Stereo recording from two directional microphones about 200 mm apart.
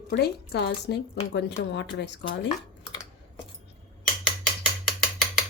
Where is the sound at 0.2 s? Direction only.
55° left (ahead or behind).